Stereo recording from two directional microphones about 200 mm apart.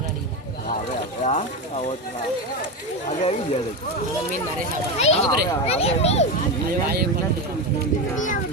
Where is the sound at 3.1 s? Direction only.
30° left (ahead or behind).